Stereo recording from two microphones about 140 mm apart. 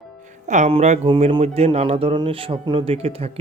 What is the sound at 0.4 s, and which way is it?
Speech, 60° right (ahead or behind).